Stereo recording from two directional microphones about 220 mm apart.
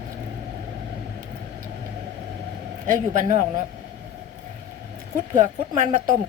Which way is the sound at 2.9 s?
35° right (ahead or behind).